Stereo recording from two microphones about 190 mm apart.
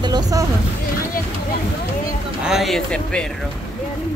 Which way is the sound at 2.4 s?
Centre (ahead or behind).